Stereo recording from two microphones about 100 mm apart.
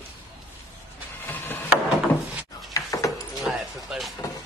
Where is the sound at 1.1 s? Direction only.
20° left (ahead or behind).